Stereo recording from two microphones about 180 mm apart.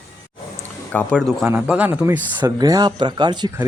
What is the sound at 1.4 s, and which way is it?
Speech, 10° right (ahead or behind).